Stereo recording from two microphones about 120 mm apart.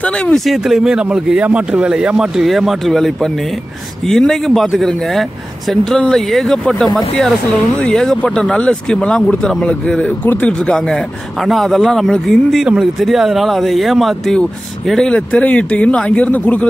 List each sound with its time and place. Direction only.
0.0 s speech: 5° left (ahead or behind)